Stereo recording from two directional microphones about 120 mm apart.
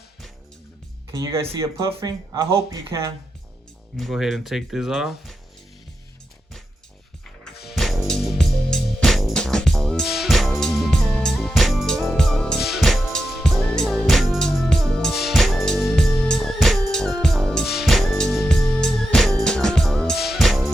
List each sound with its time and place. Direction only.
1.4 s speech: 20° right (ahead or behind)
3.9 s speech: centre (ahead or behind)
7.4 s music: centre (ahead or behind)